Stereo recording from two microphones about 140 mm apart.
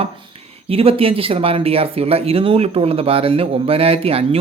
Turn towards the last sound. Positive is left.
turn(degrees=-45)  # may be behind; listen again after turning